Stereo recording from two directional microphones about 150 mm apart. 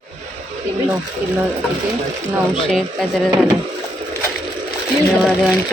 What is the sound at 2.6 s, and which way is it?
Speech, 5° left (ahead or behind).